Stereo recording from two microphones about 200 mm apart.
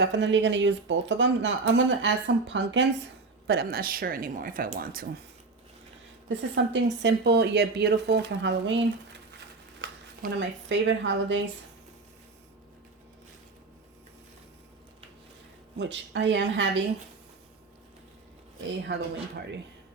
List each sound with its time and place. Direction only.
0.0 s speech: 60° right (ahead or behind)
6.2 s speech: 65° right (ahead or behind)
9.8 s speech: 65° right (ahead or behind)
15.8 s speech: 60° right (ahead or behind)